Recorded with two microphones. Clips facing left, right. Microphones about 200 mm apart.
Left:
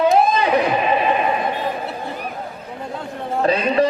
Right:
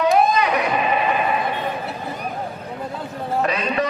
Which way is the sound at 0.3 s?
30° left (ahead or behind).